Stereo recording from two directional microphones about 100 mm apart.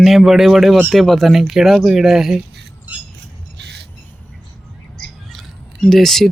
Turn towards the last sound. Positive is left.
turn(degrees=5)  # may be behind; listen again after turning